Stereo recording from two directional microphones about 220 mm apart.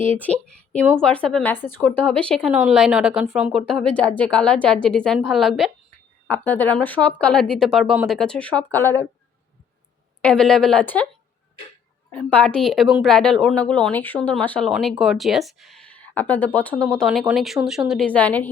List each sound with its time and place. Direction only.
0.1 s a woman's voice: 5° left (ahead or behind)
10.2 s a woman's voice: 5° left (ahead or behind)
12.1 s a woman's voice: 5° left (ahead or behind)